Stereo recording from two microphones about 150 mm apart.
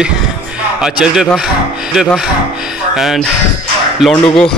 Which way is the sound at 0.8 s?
5° right (ahead or behind).